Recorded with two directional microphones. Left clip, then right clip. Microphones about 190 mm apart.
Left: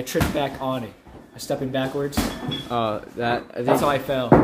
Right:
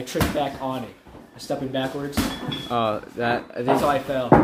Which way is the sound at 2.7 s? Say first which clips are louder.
Right 1 dB; 5° right (ahead or behind).